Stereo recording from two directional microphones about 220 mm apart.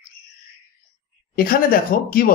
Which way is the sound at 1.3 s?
40° left (ahead or behind).